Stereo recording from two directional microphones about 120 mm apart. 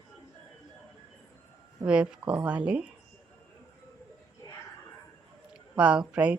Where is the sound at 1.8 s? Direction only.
10° right (ahead or behind).